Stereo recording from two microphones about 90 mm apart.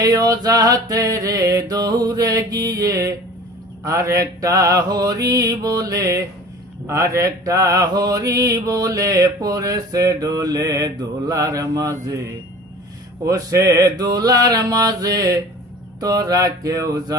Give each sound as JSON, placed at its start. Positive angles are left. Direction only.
{"t": 0.0, "sound": "mantra", "side_deg": -45}
{"t": 13.2, "sound": "mantra", "side_deg": -40}